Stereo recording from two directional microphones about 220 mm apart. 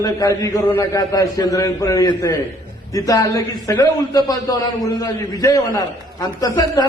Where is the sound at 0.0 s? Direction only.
15° left (ahead or behind).